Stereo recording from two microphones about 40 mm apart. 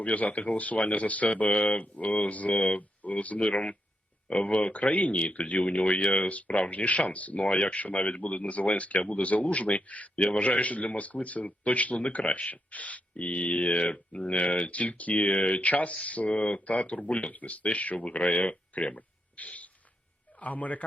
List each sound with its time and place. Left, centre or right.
0.0 s speech: left